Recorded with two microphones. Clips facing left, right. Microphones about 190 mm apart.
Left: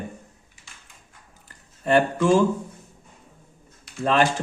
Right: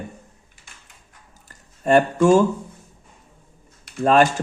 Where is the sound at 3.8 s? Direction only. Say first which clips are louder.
Right 5 dB; 50° right (ahead or behind).